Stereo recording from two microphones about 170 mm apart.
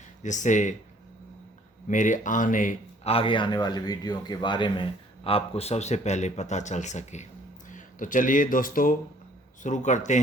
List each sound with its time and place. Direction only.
0.2 s speech: 45° left (ahead or behind)
1.9 s speech: 50° left (ahead or behind)
3.1 s speech: 30° left (ahead or behind)